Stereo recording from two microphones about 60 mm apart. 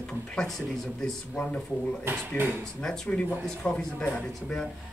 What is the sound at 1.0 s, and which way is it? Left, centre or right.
Speech, centre.